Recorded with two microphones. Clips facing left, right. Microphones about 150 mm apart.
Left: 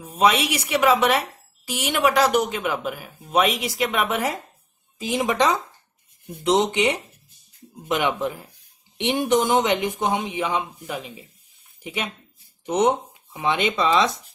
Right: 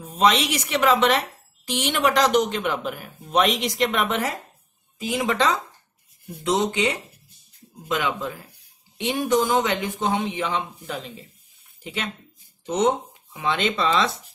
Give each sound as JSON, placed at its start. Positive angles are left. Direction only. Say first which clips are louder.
{"t": 0.0, "sound": "a woman's voice", "louder": "even", "side_deg": 10}
{"t": 4.9, "sound": "a woman's voice", "louder": "left 1 dB", "side_deg": 20}